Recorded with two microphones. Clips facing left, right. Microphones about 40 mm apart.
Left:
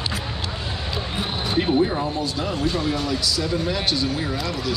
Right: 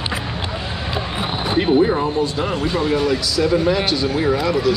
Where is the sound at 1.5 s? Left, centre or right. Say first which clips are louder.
Right 5 dB; right.